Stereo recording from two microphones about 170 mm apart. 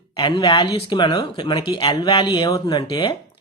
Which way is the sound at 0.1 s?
25° left (ahead or behind).